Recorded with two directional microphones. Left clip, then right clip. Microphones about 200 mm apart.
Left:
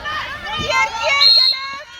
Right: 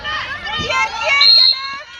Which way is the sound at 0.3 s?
65° left (ahead or behind).